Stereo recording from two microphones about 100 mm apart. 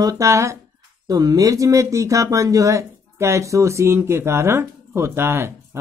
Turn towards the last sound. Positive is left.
turn(degrees=-25)  # may be behind; listen again after turning